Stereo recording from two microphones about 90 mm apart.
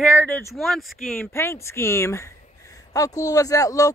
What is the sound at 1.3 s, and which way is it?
Speech, 30° left (ahead or behind).